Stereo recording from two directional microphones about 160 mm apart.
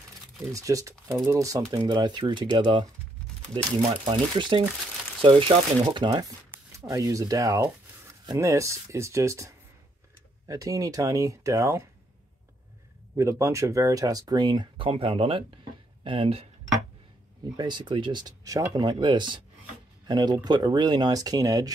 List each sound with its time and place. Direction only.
0.5 s speech: 20° right (ahead or behind)
10.5 s speech: 20° right (ahead or behind)
13.1 s speech: 20° right (ahead or behind); by 16.4 s 35° right (ahead or behind)
17.6 s speech: 30° right (ahead or behind)